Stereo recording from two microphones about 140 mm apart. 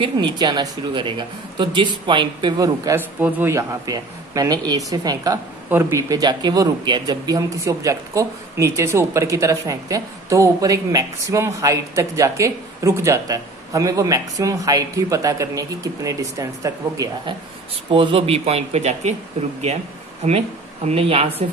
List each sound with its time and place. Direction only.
0.0 s speech: 30° right (ahead or behind)
3.2 s speech: 10° right (ahead or behind)
17.9 s speech: 40° right (ahead or behind)
20.9 s speech: 45° right (ahead or behind)